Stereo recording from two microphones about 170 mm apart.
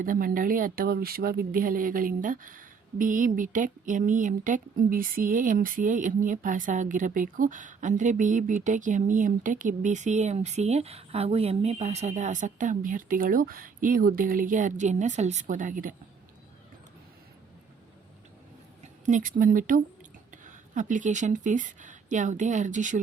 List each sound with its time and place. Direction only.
0.0 s speech: 55° right (ahead or behind)
18.8 s a sound: 50° right (ahead or behind)
19.4 s speech: 55° right (ahead or behind)